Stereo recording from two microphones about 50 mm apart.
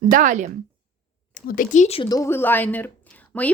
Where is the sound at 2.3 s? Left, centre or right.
Left.